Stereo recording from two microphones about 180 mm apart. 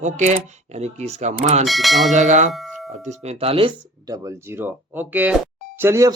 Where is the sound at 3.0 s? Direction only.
35° right (ahead or behind).